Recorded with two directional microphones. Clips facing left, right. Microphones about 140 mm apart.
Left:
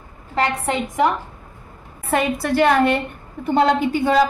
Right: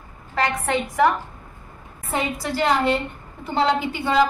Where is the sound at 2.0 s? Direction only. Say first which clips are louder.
Left 6 dB; 65° left (ahead or behind).